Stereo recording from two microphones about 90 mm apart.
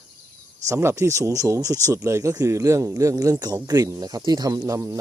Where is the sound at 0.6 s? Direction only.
35° right (ahead or behind); by 4.6 s 50° right (ahead or behind).